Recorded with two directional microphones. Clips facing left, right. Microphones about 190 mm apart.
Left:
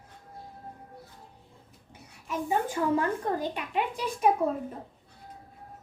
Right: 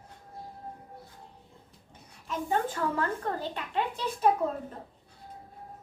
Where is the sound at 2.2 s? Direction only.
10° left (ahead or behind).